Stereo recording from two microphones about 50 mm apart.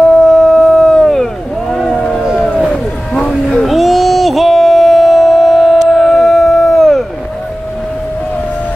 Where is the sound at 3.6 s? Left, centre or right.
Centre.